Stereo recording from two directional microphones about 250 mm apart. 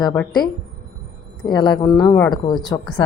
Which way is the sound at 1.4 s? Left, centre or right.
Centre.